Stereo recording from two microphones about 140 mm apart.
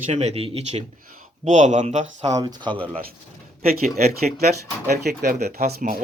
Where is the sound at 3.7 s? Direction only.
90° right.